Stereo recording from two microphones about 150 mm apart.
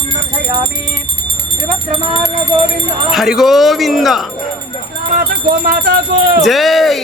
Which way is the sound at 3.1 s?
Centre (ahead or behind).